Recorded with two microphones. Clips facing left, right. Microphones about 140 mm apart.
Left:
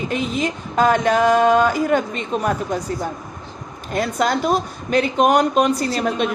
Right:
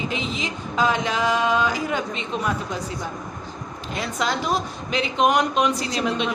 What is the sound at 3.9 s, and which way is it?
Speech, 50° left (ahead or behind).